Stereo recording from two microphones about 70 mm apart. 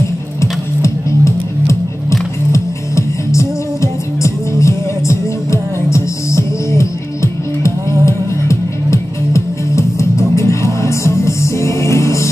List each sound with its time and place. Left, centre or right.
0.4 s music: left